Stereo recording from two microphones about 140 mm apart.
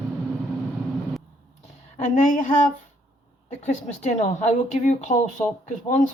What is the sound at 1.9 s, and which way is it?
Speech, 60° left (ahead or behind).